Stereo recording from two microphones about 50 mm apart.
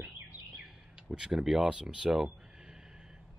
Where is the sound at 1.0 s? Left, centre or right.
Centre.